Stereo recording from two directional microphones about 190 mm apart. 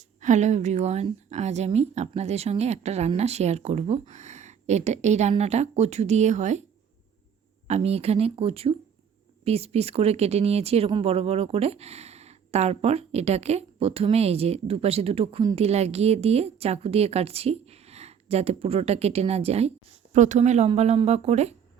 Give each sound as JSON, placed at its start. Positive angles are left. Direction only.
{"t": 0.2, "sound": "a woman's voice", "side_deg": -40}
{"t": 7.7, "sound": "a woman's voice", "side_deg": -35}